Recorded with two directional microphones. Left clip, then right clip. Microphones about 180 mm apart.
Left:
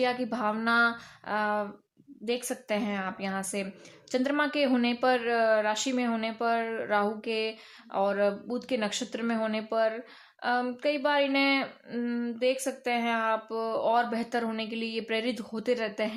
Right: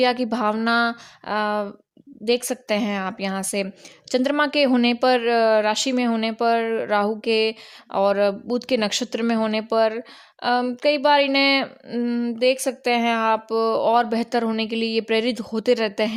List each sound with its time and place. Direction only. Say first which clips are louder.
0.0 s a woman's voice: right 8 dB; 45° right (ahead or behind)